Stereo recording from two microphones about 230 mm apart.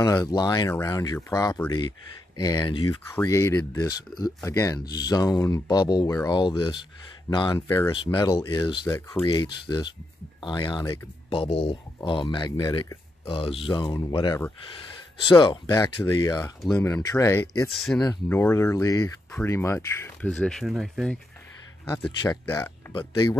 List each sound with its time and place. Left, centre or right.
0.0 s speech: centre
21.8 s speech: centre